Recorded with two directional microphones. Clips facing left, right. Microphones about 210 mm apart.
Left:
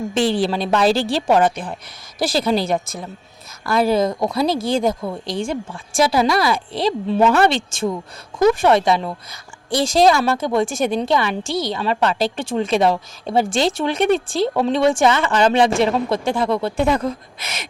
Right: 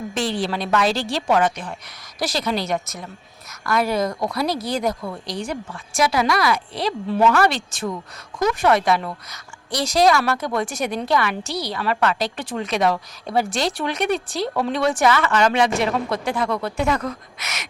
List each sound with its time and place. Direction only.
0.7 s a woman's voice: 30° left (ahead or behind)